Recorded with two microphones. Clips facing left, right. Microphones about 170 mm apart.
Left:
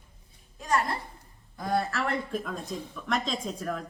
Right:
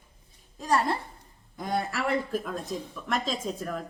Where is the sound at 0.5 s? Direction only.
30° right (ahead or behind).